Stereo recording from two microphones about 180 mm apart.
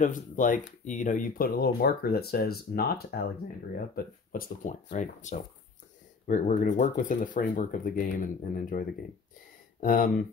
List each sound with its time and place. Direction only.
0.0 s speech: 45° left (ahead or behind)